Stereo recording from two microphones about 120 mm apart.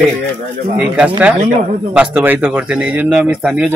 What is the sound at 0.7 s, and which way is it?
Speech, 10° right (ahead or behind).